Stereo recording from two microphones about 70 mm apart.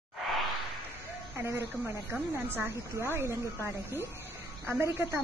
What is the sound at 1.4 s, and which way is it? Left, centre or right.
A woman's voice, right.